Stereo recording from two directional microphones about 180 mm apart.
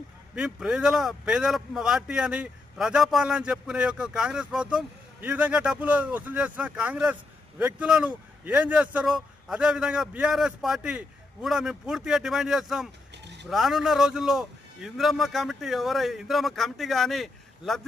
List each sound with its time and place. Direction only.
0.3 s speech: 5° right (ahead or behind)
13.2 s a sound: 70° right (ahead or behind)
13.5 s speech: centre (ahead or behind)